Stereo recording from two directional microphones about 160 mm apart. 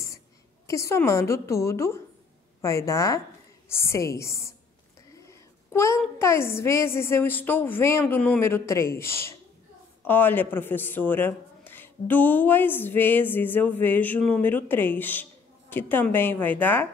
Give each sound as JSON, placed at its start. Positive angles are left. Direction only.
{"t": 0.7, "sound": "a woman's voice", "side_deg": 20}